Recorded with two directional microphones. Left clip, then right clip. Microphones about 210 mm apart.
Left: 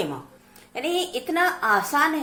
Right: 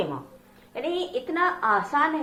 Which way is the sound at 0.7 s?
50° left (ahead or behind).